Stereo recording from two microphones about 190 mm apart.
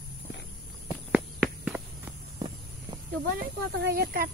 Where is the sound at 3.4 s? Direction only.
55° right (ahead or behind).